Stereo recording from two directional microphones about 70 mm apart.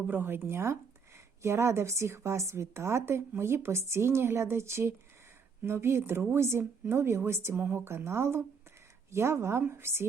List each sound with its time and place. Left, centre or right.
0.1 s a woman's voice: right
7.6 s speech: right
7.9 s a woman's voice: right